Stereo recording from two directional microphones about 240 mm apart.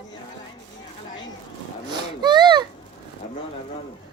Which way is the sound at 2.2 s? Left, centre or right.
Centre.